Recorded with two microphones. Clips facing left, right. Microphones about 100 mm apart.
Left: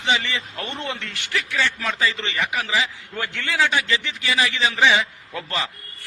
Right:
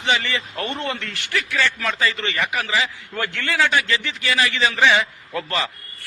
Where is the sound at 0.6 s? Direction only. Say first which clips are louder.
Right 4 dB; 50° right (ahead or behind).